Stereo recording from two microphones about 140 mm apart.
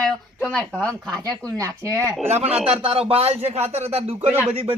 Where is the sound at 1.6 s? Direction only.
20° right (ahead or behind).